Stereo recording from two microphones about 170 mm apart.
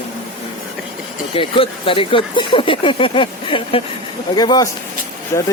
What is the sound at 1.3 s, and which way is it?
Speech, 30° left (ahead or behind).